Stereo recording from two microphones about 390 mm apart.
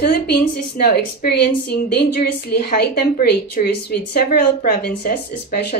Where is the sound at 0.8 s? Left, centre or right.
Left.